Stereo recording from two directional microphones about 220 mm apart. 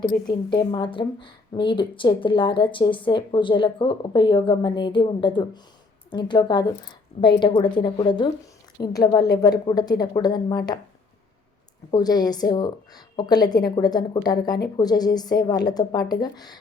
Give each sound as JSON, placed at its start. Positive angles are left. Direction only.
{"t": 0.3, "sound": "a woman's voice", "side_deg": 20}
{"t": 11.9, "sound": "a woman's voice", "side_deg": 15}